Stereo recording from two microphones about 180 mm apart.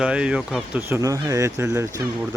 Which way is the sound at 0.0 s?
5° right (ahead or behind).